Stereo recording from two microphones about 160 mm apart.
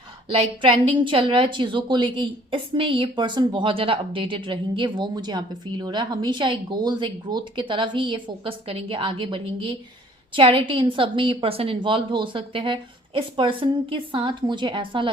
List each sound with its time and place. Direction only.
0.3 s a woman's voice: 30° right (ahead or behind)